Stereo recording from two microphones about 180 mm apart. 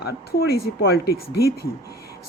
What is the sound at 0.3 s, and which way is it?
A woman's voice, 60° left (ahead or behind).